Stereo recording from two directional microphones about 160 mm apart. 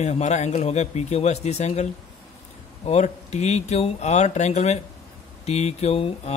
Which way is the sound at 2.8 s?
45° left (ahead or behind).